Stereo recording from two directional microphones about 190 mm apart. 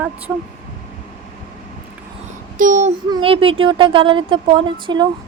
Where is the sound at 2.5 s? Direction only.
45° right (ahead or behind).